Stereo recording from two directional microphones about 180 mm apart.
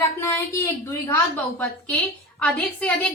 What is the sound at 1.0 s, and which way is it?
Speech, 10° left (ahead or behind).